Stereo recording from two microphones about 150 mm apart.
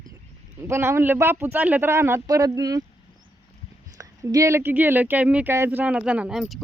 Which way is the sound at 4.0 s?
20° right (ahead or behind).